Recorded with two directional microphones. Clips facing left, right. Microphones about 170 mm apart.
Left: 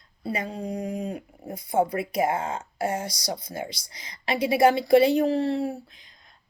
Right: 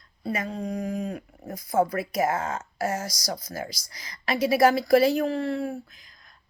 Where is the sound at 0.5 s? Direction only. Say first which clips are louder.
Right 1 dB; 30° left (ahead or behind).